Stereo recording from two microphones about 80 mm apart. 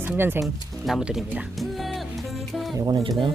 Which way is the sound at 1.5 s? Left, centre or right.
Centre.